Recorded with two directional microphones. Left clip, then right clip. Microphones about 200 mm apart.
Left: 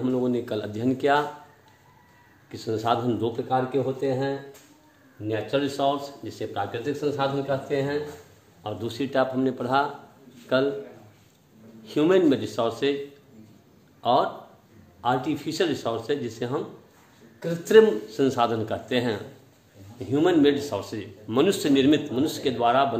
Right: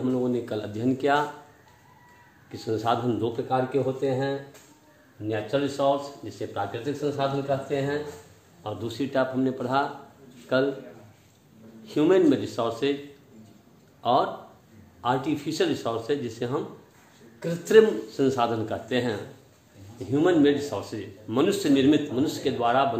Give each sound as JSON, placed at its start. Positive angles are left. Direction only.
{"t": 0.0, "sound": "a man's voice", "side_deg": 30}
{"t": 2.5, "sound": "speech", "side_deg": 15}
{"t": 5.5, "sound": "a man's voice", "side_deg": 35}
{"t": 11.8, "sound": "a man's voice", "side_deg": 20}
{"t": 14.0, "sound": "a man's voice", "side_deg": 15}